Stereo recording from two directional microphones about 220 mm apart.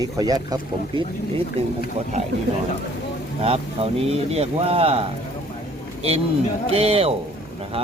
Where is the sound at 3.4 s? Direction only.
25° right (ahead or behind).